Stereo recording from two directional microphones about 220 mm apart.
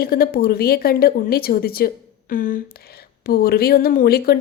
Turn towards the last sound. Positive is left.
turn(degrees=45)  # may be behind; listen again after turning